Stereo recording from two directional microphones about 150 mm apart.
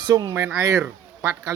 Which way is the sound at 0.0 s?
25° right (ahead or behind).